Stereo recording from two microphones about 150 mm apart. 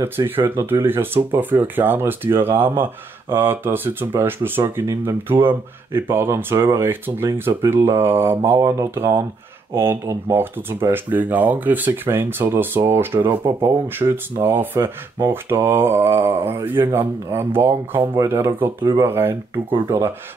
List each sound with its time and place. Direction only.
0.0 s speech: 15° right (ahead or behind)